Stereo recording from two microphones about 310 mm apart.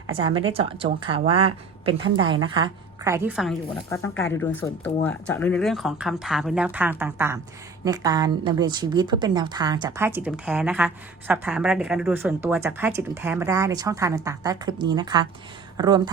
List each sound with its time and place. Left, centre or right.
0.2 s a woman's voice: centre